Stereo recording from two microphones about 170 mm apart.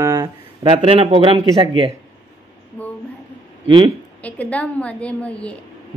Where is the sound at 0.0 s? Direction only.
20° right (ahead or behind).